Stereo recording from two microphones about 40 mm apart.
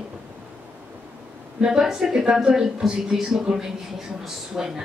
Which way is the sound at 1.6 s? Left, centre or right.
Centre.